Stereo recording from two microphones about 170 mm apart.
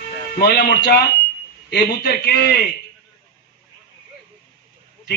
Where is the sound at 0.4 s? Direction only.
70° left (ahead or behind).